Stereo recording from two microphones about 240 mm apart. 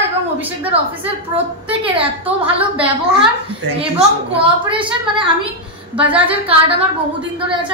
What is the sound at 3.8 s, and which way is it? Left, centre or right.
A woman's voice, right.